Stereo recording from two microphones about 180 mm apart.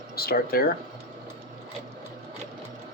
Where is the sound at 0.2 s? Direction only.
55° left (ahead or behind).